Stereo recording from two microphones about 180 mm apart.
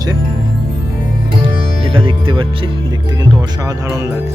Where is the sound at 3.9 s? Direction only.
15° right (ahead or behind).